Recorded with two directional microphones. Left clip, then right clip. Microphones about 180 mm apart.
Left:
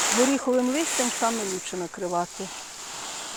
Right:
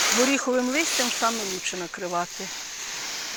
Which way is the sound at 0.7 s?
25° left (ahead or behind).